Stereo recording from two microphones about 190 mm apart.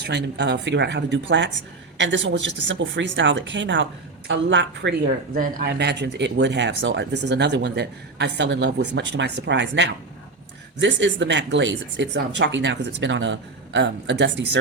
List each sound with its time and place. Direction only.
0.1 s speech: 65° right (ahead or behind)